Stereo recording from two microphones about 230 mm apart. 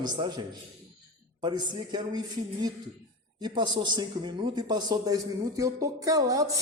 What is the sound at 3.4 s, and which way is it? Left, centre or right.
A man's voice, centre.